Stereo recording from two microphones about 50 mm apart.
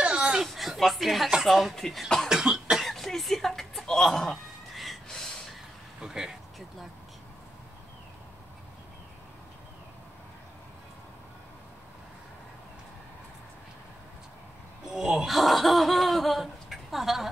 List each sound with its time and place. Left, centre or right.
0.0 s a sound: right
0.5 s chuckle: centre
1.4 s speech: centre
2.2 s cough: centre
2.8 s a sound: centre
5.0 s gasp: centre
5.9 s speech: centre
14.9 s grunt: centre
15.2 s laughter: centre